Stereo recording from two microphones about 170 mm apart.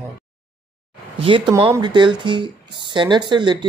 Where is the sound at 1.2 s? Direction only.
30° right (ahead or behind).